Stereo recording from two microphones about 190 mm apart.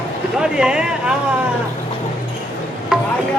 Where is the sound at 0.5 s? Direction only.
5° right (ahead or behind).